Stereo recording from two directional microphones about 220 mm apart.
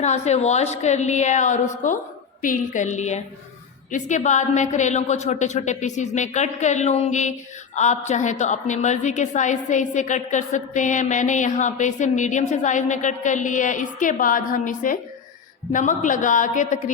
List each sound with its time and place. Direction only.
0.0 s a woman's voice: 30° left (ahead or behind)